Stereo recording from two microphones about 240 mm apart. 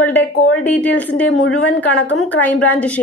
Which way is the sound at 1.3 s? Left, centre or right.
Left.